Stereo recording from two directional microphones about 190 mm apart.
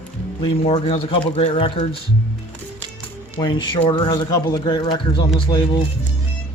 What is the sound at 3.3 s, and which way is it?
Speech, 25° left (ahead or behind).